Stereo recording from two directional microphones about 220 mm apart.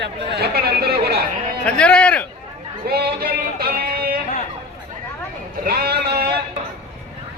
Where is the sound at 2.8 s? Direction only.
45° right (ahead or behind).